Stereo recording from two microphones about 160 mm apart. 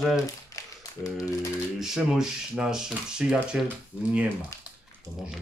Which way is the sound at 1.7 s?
Centre (ahead or behind).